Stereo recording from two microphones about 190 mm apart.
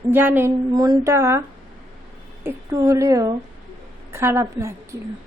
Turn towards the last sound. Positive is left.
turn(degrees=-15)  # may be behind; listen again after turning